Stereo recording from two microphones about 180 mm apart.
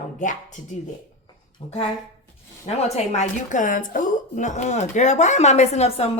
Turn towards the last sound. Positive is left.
turn(degrees=35)  # may be behind; listen again after turning